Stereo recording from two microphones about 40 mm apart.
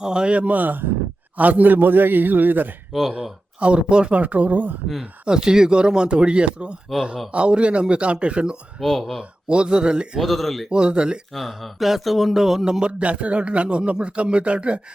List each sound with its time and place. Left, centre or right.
0.0 s a man's voice: right
0.3 s a man's voice: right
1.4 s a man's voice: right
3.6 s a man's voice: right
4.1 s speech: right
5.2 s a man's voice: centre
8.8 s speech: centre
9.5 s a man's voice: right
10.2 s speech: centre
10.7 s a man's voice: right
11.3 s speech: centre
12.8 s a man's voice: right